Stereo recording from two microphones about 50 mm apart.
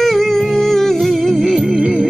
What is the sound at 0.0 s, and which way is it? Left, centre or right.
Music, centre.